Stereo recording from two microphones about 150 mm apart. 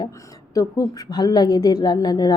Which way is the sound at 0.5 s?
25° left (ahead or behind).